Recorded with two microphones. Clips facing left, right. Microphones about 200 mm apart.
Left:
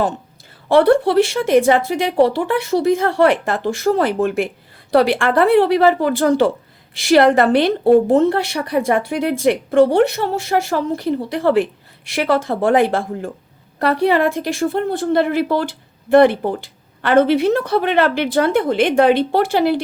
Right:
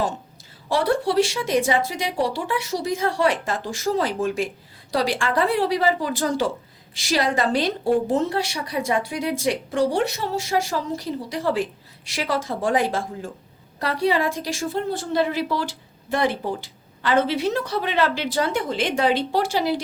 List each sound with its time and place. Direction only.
0.7 s a woman's voice: 60° left (ahead or behind)